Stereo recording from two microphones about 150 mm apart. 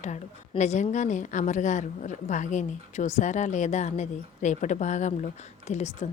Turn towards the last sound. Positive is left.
turn(degrees=50)  # may be behind; listen again after turning